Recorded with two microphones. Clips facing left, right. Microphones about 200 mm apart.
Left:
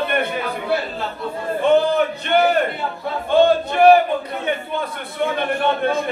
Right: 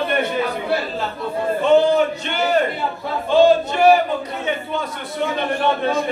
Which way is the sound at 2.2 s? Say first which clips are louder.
Left 2 dB; 55° left (ahead or behind).